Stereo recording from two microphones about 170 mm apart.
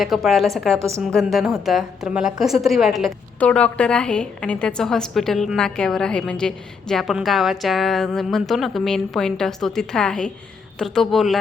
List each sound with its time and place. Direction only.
0.0 s a woman's voice: centre (ahead or behind)
0.8 s a woman's voice: 15° right (ahead or behind)
1.0 s a woman's voice: centre (ahead or behind)